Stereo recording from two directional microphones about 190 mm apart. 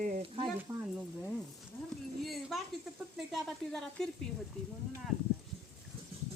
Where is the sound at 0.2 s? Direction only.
30° right (ahead or behind).